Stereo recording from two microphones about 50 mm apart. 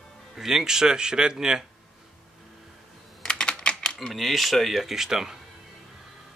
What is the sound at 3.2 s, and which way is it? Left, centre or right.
Typing, centre.